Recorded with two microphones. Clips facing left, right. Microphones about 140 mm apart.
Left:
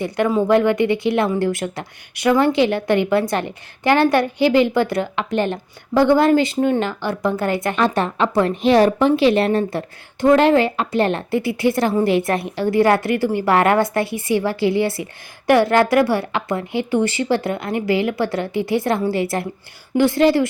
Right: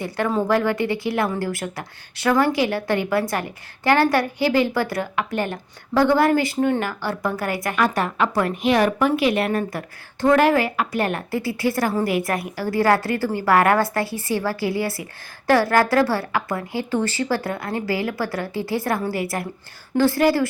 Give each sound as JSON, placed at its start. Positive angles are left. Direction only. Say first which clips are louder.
{"t": 0.4, "sound": "a woman's voice", "louder": "left 7 dB", "side_deg": 20}